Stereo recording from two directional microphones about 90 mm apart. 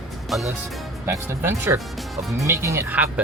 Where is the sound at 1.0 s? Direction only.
30° right (ahead or behind).